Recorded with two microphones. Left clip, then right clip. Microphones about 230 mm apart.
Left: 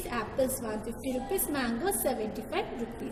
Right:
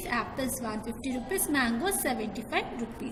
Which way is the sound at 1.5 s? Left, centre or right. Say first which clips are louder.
Right 6 dB; right.